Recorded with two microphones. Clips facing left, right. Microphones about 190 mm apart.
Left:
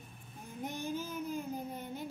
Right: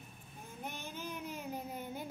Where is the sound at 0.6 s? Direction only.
15° left (ahead or behind).